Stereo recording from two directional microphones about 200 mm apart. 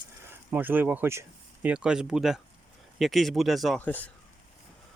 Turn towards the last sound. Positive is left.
turn(degrees=10)  # may be behind; listen again after turning